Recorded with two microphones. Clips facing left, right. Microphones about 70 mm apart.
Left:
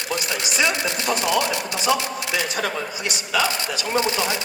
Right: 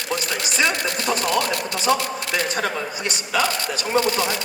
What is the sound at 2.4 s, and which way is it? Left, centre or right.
Speech, right.